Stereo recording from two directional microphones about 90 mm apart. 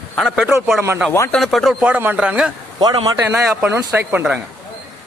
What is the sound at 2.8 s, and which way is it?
Speech, 50° right (ahead or behind).